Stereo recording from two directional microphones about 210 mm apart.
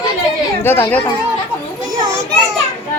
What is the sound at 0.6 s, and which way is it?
Speech, 10° left (ahead or behind).